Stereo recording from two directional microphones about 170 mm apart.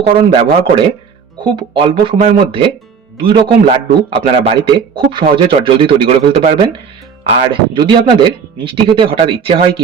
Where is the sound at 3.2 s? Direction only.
30° right (ahead or behind).